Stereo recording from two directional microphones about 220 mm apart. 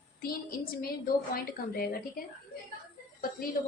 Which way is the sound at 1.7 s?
40° left (ahead or behind).